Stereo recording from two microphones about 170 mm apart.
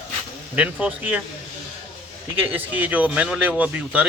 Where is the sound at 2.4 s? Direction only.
10° right (ahead or behind).